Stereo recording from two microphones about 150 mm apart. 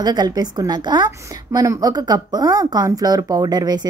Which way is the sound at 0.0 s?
25° right (ahead or behind).